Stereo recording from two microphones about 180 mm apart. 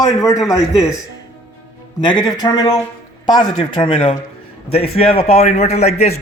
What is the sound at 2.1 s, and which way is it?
A man's voice, 20° left (ahead or behind).